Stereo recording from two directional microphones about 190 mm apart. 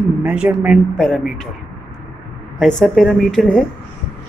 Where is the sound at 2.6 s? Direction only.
Centre (ahead or behind).